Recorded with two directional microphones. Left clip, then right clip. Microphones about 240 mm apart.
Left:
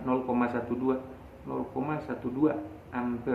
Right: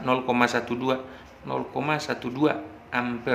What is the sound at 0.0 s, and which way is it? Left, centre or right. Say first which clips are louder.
Speech: right 6 dB; right.